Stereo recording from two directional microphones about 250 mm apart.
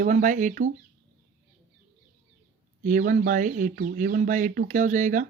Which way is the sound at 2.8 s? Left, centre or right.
Right.